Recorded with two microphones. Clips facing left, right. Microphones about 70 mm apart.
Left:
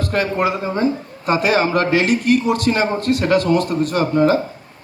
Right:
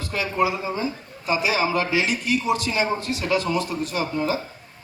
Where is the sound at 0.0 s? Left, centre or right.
Left.